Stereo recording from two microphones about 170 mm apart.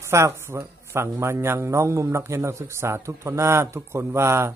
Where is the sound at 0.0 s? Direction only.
15° right (ahead or behind).